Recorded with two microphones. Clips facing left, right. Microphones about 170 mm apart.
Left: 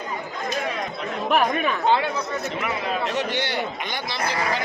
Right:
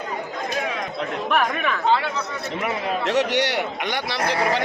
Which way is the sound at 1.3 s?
30° left (ahead or behind).